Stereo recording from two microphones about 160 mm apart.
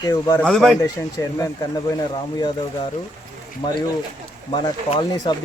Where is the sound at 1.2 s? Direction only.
20° left (ahead or behind).